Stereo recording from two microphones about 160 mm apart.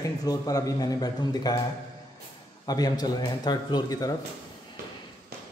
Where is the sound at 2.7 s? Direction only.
25° left (ahead or behind).